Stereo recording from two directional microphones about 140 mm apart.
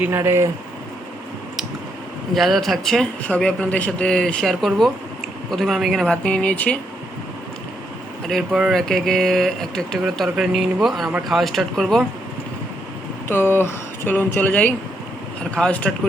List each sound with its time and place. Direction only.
0.0 s speech: 15° right (ahead or behind)
2.3 s speech: centre (ahead or behind)
8.3 s speech: centre (ahead or behind)
13.2 s speech: 15° left (ahead or behind)